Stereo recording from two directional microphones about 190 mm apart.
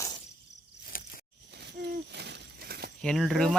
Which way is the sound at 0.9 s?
50° left (ahead or behind).